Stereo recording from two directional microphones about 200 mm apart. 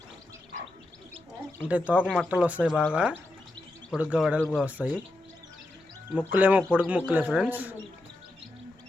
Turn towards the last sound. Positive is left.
turn(degrees=-10)  # may be behind; listen again after turning